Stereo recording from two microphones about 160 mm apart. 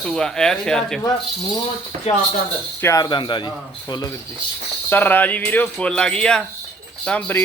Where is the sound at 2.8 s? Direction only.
20° left (ahead or behind).